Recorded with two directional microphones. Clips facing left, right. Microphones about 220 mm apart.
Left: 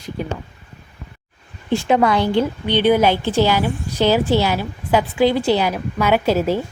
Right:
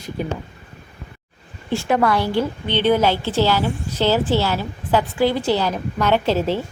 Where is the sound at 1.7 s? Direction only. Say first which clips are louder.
Left 2 dB; 15° left (ahead or behind).